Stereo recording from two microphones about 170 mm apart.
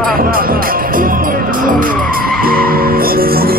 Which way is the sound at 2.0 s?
60° right (ahead or behind).